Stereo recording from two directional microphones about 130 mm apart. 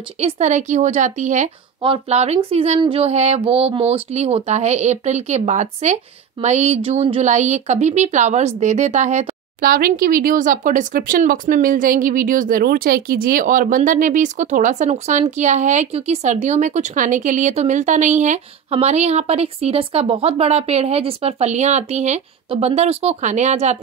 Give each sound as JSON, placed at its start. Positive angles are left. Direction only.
{"t": 0.2, "sound": "speech", "side_deg": -65}
{"t": 1.8, "sound": "speech", "side_deg": -45}
{"t": 9.6, "sound": "speech", "side_deg": -90}